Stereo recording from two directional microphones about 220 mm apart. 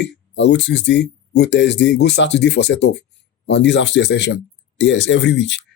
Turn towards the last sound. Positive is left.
turn(degrees=55)  # may be behind; listen again after turning